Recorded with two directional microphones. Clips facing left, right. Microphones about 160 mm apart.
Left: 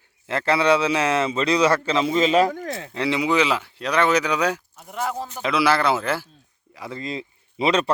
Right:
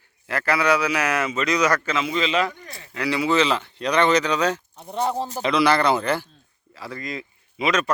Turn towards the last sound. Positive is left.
turn(degrees=30)  # may be behind; listen again after turning